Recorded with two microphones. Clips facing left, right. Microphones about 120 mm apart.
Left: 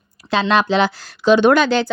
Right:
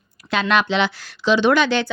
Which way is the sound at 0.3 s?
30° left (ahead or behind).